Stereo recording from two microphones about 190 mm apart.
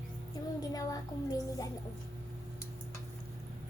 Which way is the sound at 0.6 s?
20° left (ahead or behind).